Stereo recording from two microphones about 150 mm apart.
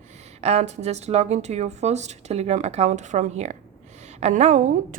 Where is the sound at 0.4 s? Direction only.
45° right (ahead or behind).